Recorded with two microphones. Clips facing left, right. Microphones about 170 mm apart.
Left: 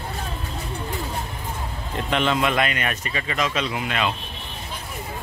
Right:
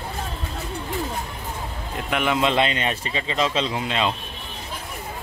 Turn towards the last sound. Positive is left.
turn(degrees=-25)  # may be behind; listen again after turning